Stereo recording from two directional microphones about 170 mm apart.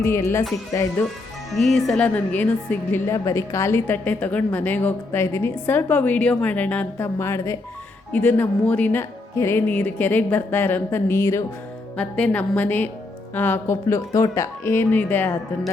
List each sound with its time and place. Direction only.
0.0 s a woman's voice: 15° left (ahead or behind)
1.5 s a woman's voice: centre (ahead or behind)